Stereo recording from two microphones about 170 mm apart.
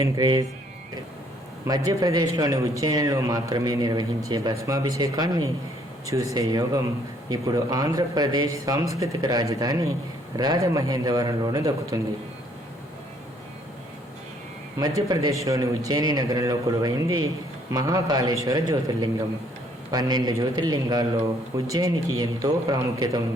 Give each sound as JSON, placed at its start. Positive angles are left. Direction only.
{"t": 0.0, "sound": "a man's voice", "side_deg": -25}
{"t": 1.6, "sound": "a man's voice", "side_deg": -20}
{"t": 14.8, "sound": "a man's voice", "side_deg": -20}